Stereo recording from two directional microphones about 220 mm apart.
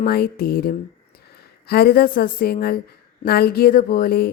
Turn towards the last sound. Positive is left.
turn(degrees=45)  # may be behind; listen again after turning